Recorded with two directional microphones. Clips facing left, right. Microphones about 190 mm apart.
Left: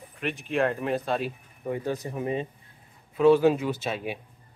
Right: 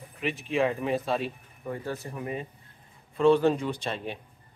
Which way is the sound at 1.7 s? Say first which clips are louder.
Left 4 dB; 15° left (ahead or behind).